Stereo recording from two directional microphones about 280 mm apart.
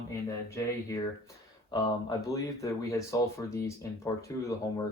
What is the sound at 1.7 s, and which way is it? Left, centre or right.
Speech, centre.